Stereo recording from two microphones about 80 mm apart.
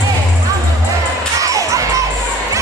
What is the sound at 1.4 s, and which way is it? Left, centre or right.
Music, right.